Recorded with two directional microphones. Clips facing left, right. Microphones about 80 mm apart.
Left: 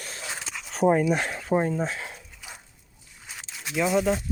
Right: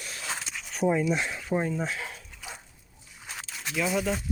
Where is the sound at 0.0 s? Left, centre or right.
Left.